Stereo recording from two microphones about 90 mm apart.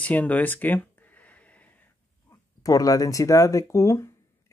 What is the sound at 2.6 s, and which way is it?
Speech, 40° left (ahead or behind).